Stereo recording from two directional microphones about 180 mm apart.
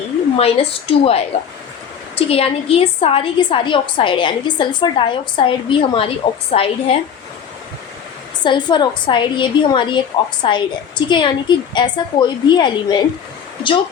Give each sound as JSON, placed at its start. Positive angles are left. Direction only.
{"t": 0.3, "sound": "a woman's voice", "side_deg": 30}
{"t": 8.4, "sound": "a woman's voice", "side_deg": 25}